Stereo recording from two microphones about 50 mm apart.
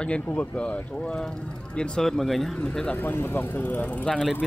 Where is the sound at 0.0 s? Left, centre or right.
Left; by 2.5 s centre.